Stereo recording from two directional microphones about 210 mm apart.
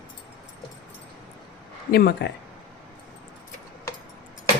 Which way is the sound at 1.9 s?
50° left (ahead or behind).